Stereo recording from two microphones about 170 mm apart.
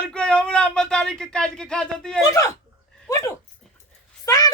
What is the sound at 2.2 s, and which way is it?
Speech, 20° left (ahead or behind).